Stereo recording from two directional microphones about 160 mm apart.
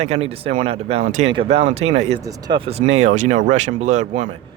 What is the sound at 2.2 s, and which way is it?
Speech, 25° right (ahead or behind).